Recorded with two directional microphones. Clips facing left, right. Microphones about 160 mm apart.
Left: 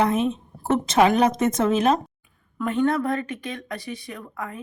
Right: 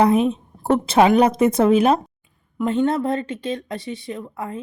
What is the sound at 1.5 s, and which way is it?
Speech, 30° right (ahead or behind).